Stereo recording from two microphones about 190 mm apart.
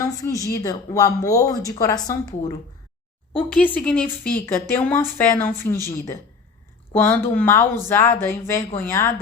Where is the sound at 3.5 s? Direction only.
5° left (ahead or behind).